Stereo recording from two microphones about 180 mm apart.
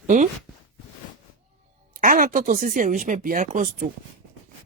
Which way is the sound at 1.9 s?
50° right (ahead or behind).